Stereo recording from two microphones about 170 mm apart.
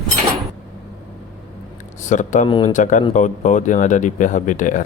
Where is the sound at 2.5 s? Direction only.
30° left (ahead or behind).